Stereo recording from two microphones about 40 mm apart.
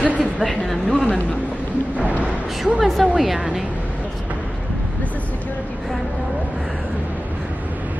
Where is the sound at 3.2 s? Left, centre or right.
Centre.